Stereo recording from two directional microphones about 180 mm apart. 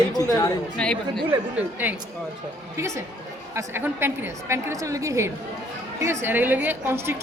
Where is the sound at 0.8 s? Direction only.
5° left (ahead or behind).